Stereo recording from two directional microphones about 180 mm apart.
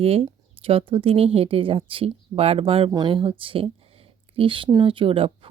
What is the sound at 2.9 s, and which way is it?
Speech, 20° right (ahead or behind).